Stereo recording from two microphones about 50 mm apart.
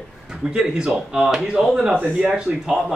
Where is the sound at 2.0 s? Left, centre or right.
Right.